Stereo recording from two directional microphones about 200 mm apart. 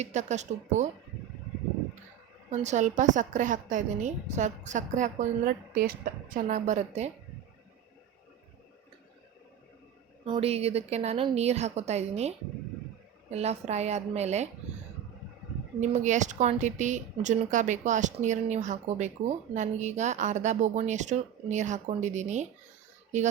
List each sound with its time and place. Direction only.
0.0 s a woman's voice: 35° right (ahead or behind)
2.5 s a woman's voice: 35° right (ahead or behind)
10.2 s a woman's voice: 25° right (ahead or behind)
13.3 s a woman's voice: 35° right (ahead or behind)
15.8 s a woman's voice: 35° right (ahead or behind)